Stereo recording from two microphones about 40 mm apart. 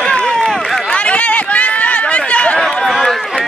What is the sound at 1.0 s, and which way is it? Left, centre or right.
Run, left.